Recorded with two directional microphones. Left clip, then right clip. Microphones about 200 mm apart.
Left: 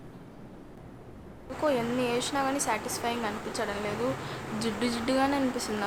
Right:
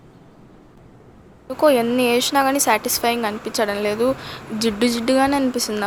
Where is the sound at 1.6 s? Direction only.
40° right (ahead or behind).